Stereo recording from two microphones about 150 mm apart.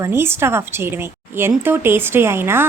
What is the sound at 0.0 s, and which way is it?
A woman's voice, 15° right (ahead or behind).